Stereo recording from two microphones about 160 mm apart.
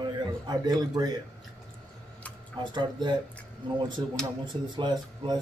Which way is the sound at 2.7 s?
30° right (ahead or behind).